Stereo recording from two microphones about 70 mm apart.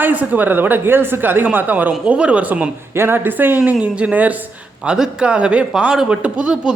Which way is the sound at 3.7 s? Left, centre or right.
Centre.